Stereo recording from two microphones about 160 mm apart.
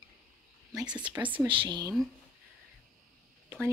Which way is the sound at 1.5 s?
30° right (ahead or behind).